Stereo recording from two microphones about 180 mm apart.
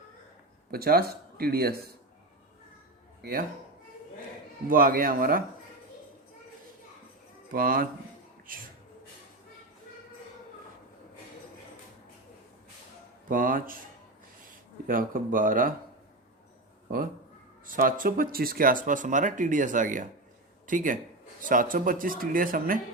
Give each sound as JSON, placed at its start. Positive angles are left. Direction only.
{"t": 0.7, "sound": "speech", "side_deg": -60}
{"t": 4.7, "sound": "speech", "side_deg": -50}
{"t": 7.5, "sound": "speech", "side_deg": -55}
{"t": 13.2, "sound": "speech", "side_deg": -50}
{"t": 14.8, "sound": "speech", "side_deg": -50}
{"t": 17.7, "sound": "speech", "side_deg": -50}